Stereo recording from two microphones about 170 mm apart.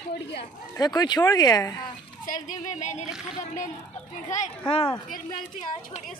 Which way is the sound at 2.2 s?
50° left (ahead or behind).